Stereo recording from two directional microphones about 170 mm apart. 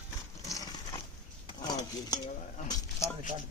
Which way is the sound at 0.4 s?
20° left (ahead or behind).